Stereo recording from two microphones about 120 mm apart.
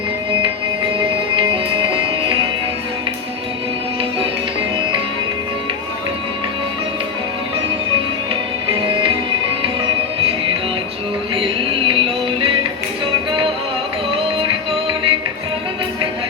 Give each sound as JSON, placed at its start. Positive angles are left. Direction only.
{"t": 1.4, "sound": "music", "side_deg": -45}
{"t": 8.7, "sound": "music", "side_deg": -45}
{"t": 11.3, "sound": "music", "side_deg": -50}
{"t": 14.3, "sound": "music", "side_deg": -50}